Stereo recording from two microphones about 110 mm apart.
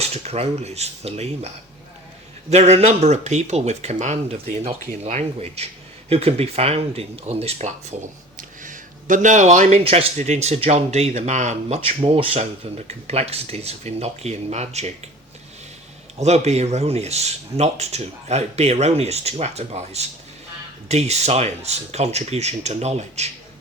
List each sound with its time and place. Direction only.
0.1 s speech: 70° right (ahead or behind)
2.5 s speech: 75° right (ahead or behind)
6.1 s speech: 65° right (ahead or behind)
9.2 s speech: 90° right
16.1 s speech: 85° right